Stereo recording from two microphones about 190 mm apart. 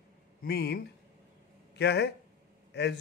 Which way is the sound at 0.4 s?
60° left (ahead or behind).